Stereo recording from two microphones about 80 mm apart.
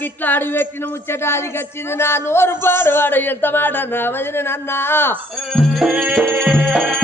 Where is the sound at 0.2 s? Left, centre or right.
Left.